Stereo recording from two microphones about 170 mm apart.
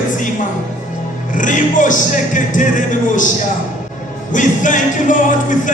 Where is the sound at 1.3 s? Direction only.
50° left (ahead or behind).